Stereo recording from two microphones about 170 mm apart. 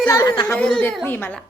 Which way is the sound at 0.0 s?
20° left (ahead or behind).